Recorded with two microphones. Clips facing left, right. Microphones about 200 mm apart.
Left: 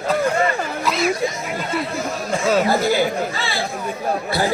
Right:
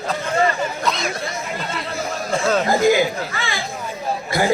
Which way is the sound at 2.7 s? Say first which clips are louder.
Right 2 dB; 15° right (ahead or behind).